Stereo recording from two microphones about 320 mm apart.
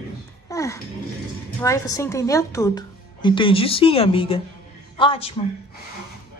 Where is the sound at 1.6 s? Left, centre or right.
Centre.